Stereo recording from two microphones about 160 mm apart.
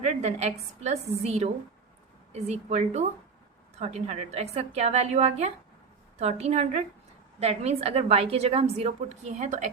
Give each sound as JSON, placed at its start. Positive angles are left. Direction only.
{"t": 0.0, "sound": "a woman's voice", "side_deg": -45}